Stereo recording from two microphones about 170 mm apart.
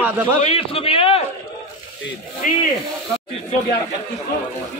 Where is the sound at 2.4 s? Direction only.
50° left (ahead or behind).